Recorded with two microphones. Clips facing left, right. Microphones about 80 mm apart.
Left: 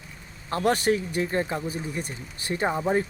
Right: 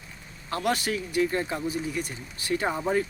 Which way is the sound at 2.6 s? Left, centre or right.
Centre.